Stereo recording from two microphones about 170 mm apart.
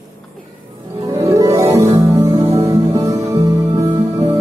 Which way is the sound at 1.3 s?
20° right (ahead or behind).